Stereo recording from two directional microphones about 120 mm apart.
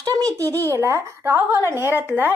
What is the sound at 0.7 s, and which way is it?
A woman's voice, 25° right (ahead or behind).